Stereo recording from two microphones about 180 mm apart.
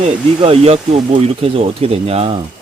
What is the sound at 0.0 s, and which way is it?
Speech, 35° right (ahead or behind).